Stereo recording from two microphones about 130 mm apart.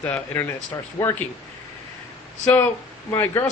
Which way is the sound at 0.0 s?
10° left (ahead or behind).